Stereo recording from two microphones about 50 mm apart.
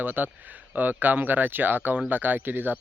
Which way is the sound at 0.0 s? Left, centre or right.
Right.